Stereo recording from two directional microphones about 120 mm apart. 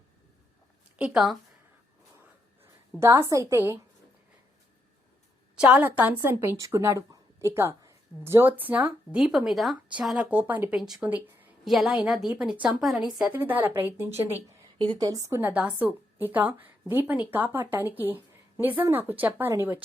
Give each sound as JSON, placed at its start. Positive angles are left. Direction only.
{"t": 0.9, "sound": "speech", "side_deg": -10}
{"t": 3.0, "sound": "a woman's voice", "side_deg": -20}
{"t": 5.5, "sound": "a woman's voice", "side_deg": -10}
{"t": 10.3, "sound": "speech", "side_deg": -15}
{"t": 10.8, "sound": "a woman's voice", "side_deg": -5}
{"t": 13.3, "sound": "speech", "side_deg": -15}
{"t": 14.3, "sound": "a woman's voice", "side_deg": -45}
{"t": 15.0, "sound": "a woman's voice", "side_deg": -30}
{"t": 15.4, "sound": "speech", "side_deg": -15}